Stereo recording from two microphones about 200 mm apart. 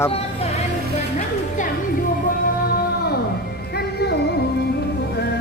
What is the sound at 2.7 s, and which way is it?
Music, 50° left (ahead or behind).